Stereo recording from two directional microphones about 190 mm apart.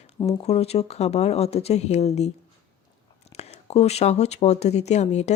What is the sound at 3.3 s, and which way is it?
Speech, 35° left (ahead or behind).